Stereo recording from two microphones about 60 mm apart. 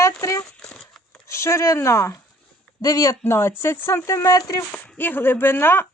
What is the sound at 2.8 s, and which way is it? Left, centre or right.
Speech, left.